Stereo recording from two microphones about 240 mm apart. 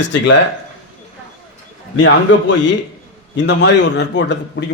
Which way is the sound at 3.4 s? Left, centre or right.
Left.